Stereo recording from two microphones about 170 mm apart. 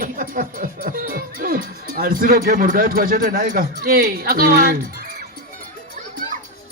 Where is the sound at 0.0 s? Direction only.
55° right (ahead or behind).